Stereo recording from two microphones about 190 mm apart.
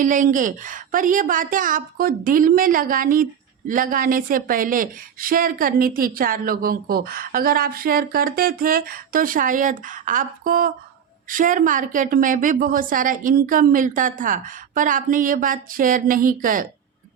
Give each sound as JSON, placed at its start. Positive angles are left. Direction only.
{"t": 0.0, "sound": "a woman's voice", "side_deg": -45}